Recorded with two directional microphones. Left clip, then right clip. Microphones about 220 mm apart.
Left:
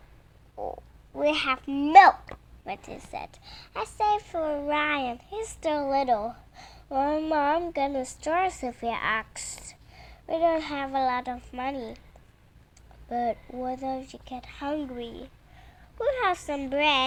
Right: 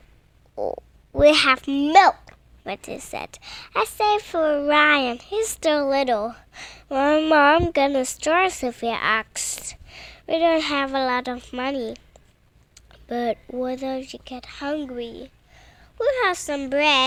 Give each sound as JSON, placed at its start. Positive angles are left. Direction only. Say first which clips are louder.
{"t": 0.5, "sound": "a child's voice", "louder": "right 8 dB", "side_deg": -50}